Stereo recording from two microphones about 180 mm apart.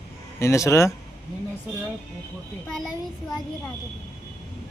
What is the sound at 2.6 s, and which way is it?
Speech, centre (ahead or behind).